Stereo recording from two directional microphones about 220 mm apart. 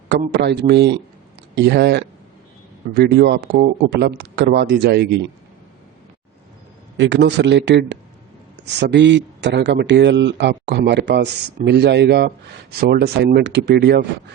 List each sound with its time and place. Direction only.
0.1 s a man's voice: 50° right (ahead or behind)
6.9 s speech: 55° right (ahead or behind)